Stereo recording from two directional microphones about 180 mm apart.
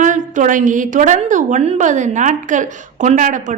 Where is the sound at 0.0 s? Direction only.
45° right (ahead or behind).